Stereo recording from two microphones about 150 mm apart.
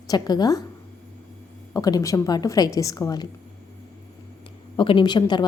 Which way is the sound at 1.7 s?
25° left (ahead or behind).